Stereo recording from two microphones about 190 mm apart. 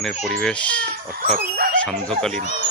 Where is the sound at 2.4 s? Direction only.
35° left (ahead or behind).